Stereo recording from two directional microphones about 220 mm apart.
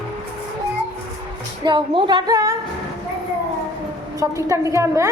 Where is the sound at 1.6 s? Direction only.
20° right (ahead or behind).